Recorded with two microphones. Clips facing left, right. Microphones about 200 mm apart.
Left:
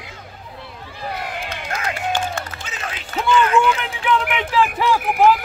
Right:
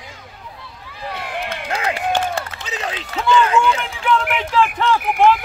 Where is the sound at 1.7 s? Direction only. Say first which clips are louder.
Right 3 dB; 30° right (ahead or behind).